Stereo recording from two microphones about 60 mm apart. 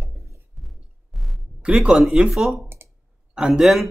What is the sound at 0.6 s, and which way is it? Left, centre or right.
Music, centre.